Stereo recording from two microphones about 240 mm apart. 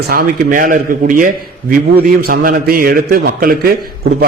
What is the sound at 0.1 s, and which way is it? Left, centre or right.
A man's voice, right.